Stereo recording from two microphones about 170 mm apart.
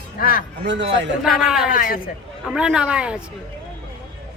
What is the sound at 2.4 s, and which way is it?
Speech, 5° right (ahead or behind).